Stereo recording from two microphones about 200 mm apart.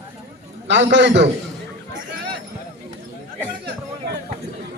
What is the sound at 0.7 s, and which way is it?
Speech, 60° right (ahead or behind).